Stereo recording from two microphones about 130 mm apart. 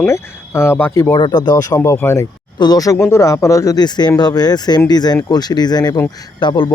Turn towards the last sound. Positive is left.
turn(degrees=35)  # may be behind; listen again after turning